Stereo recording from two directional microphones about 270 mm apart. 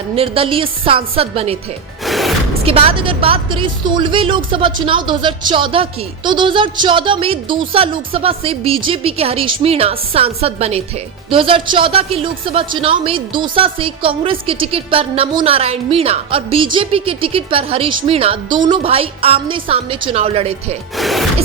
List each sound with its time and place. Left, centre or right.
0.2 s a woman's voice: centre
2.0 s music: centre
2.6 s a woman's voice: right
20.9 s speech: centre